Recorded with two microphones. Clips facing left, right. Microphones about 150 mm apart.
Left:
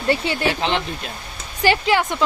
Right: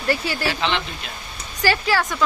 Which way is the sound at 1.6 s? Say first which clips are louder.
Left 3 dB; 20° left (ahead or behind).